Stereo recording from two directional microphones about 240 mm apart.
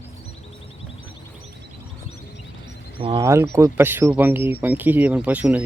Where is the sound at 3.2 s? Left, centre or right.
Centre.